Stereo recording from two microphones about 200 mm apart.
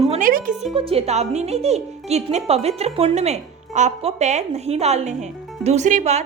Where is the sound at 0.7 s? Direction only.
30° right (ahead or behind).